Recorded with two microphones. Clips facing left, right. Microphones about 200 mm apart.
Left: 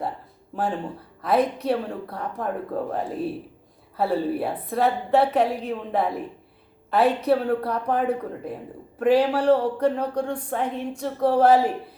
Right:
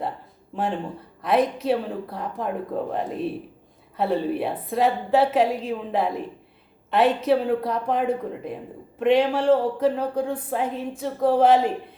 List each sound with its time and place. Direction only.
0.5 s speech: centre (ahead or behind)
7.3 s speech: centre (ahead or behind)